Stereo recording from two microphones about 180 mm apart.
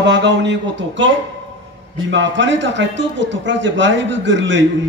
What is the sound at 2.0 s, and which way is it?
Speech, 90° right.